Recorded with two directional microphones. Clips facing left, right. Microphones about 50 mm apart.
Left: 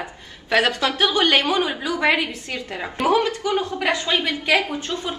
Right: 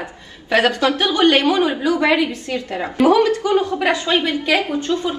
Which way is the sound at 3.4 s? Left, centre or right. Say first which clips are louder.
Right 5 dB; right.